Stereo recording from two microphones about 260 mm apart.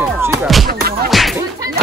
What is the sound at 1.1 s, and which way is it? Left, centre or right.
Whip, centre.